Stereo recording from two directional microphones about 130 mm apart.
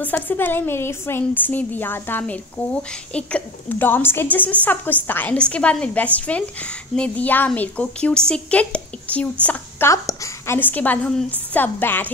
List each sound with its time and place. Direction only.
0.0 s a woman's voice: 15° left (ahead or behind)
9.8 s a woman's voice: 25° left (ahead or behind)